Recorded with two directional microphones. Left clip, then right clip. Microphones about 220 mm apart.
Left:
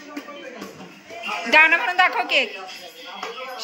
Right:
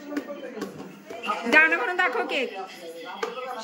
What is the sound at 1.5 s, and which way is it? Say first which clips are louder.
Speech: left 4 dB; 15° right (ahead or behind).